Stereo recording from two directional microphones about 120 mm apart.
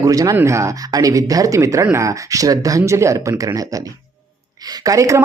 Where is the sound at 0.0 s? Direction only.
30° right (ahead or behind).